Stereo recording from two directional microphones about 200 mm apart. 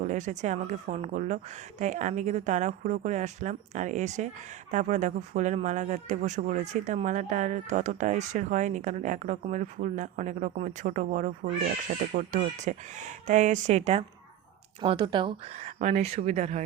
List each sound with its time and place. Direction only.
0.0 s a woman's voice: 35° right (ahead or behind)
15.5 s speech: 40° right (ahead or behind)